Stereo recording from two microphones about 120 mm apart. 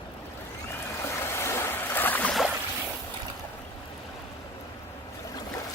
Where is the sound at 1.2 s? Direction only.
20° left (ahead or behind).